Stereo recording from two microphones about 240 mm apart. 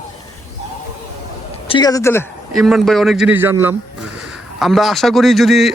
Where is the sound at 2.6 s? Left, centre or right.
Centre.